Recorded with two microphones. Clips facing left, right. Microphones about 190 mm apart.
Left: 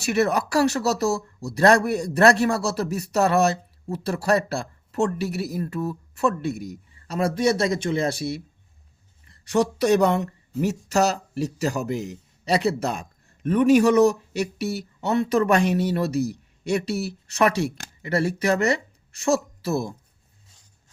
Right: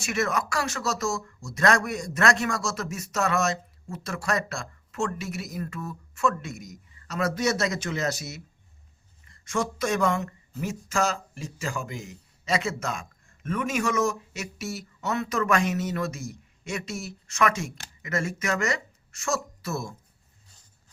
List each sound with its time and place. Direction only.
0.0 s a man's voice: 35° left (ahead or behind)
9.4 s a man's voice: 35° left (ahead or behind)